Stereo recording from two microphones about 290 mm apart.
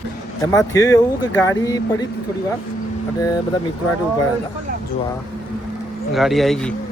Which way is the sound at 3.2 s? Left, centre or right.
Centre.